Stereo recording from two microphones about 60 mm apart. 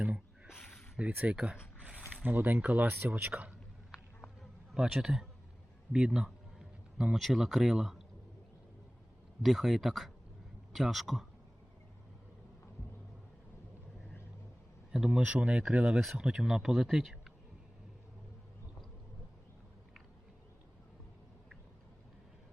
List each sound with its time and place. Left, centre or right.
0.9 s speech: right
2.0 s a sound: centre
2.2 s speech: right
4.7 s speech: centre
9.4 s speech: centre
14.9 s speech: centre